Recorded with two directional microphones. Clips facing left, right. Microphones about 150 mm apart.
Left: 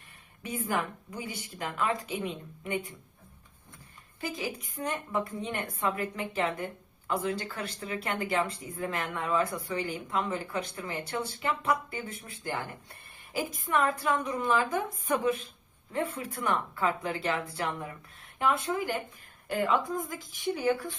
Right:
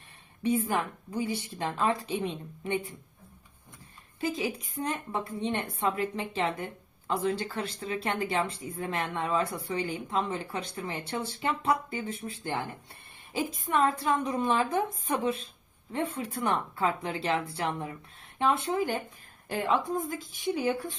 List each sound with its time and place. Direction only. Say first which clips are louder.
0.4 s speech: right 4 dB; 30° right (ahead or behind)
4.2 s a woman's voice: right 4 dB; 25° right (ahead or behind)